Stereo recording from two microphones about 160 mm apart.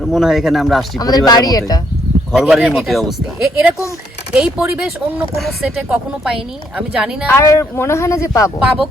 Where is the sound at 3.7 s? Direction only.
20° left (ahead or behind).